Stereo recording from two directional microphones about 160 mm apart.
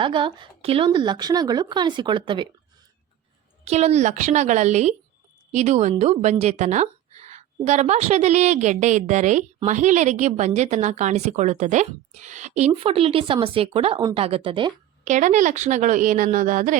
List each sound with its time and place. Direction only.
0.0 s speech: 30° right (ahead or behind)
3.6 s a woman's voice: 40° right (ahead or behind)
15.0 s a woman's voice: 50° right (ahead or behind)